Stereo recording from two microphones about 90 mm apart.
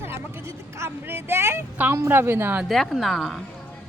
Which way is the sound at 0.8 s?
30° right (ahead or behind).